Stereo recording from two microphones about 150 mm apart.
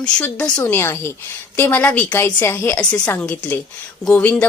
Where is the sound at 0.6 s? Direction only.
20° left (ahead or behind).